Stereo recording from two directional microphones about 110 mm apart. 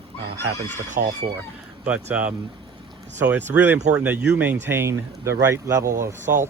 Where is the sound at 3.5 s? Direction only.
20° right (ahead or behind).